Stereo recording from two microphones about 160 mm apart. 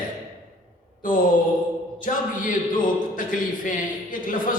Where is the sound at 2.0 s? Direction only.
55° left (ahead or behind).